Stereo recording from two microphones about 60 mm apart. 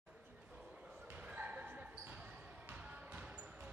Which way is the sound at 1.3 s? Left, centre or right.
Right.